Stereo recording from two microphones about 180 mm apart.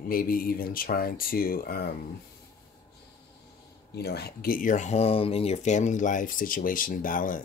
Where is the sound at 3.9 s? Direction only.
60° left (ahead or behind).